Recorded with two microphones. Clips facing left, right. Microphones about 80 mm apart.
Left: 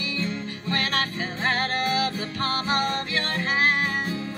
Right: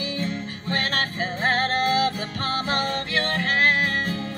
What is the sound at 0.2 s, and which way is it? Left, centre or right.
Music, right.